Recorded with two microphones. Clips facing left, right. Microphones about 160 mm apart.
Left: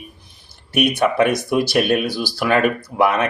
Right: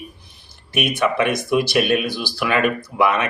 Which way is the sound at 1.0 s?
40° left (ahead or behind).